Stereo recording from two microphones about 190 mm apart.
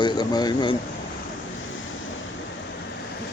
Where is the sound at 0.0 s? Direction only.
20° left (ahead or behind).